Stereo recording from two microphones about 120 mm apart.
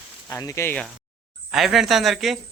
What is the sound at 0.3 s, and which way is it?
Speech, 25° left (ahead or behind).